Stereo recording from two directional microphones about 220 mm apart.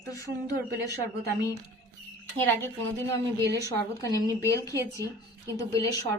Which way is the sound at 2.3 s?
10° left (ahead or behind).